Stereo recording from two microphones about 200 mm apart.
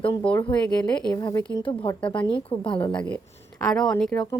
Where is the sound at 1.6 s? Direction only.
25° left (ahead or behind).